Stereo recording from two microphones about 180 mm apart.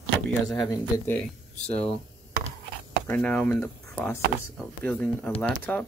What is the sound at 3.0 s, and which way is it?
Speech, 10° left (ahead or behind).